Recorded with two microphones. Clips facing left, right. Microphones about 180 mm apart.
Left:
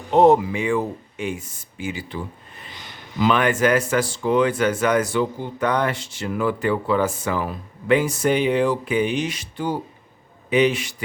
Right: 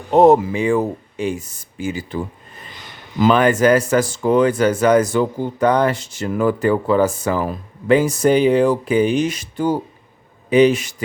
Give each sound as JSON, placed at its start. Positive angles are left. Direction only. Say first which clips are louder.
{"t": 0.1, "sound": "speech", "louder": "right 3 dB", "side_deg": -45}